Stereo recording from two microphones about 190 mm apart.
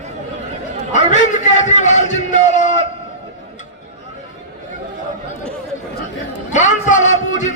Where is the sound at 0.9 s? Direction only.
40° left (ahead or behind).